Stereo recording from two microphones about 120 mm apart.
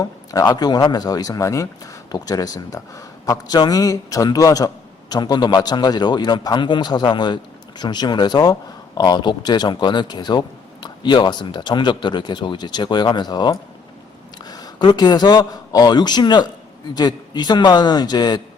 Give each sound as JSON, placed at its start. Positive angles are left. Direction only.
{"t": 0.0, "sound": "speech", "side_deg": 30}